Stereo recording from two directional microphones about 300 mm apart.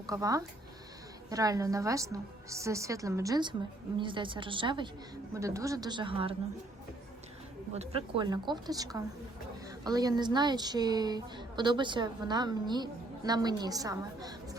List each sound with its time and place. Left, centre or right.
0.1 s speech: centre
7.7 s speech: centre